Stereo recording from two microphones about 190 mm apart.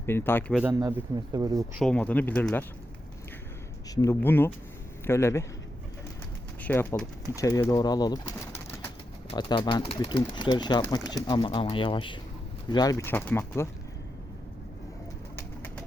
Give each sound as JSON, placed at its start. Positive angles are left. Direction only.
{"t": 0.0, "sound": "speech", "side_deg": 10}
{"t": 0.7, "sound": "speech", "side_deg": -15}
{"t": 1.8, "sound": "speech", "side_deg": 5}
{"t": 3.9, "sound": "speech", "side_deg": 15}
{"t": 6.6, "sound": "speech", "side_deg": 10}
{"t": 15.4, "sound": "bird", "side_deg": 10}